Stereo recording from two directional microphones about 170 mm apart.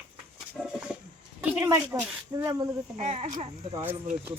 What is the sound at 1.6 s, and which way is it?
Speech, 15° right (ahead or behind).